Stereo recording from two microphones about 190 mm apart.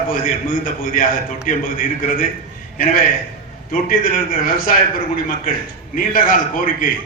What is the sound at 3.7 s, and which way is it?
A man's voice, 50° left (ahead or behind).